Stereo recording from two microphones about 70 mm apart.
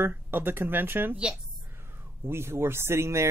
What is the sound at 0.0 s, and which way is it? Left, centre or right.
Speech, right.